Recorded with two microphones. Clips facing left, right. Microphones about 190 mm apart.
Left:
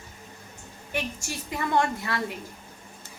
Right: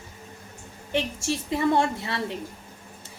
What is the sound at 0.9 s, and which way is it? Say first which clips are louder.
A woman's voice: right 6 dB; 30° right (ahead or behind).